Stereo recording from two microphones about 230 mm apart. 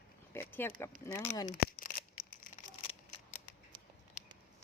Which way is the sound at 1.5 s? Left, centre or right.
Left.